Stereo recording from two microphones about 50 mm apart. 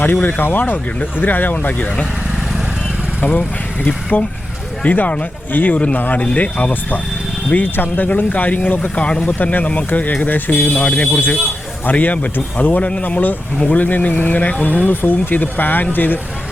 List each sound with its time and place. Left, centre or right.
0.0 s speech: left
3.2 s speech: left
9.2 s speech: left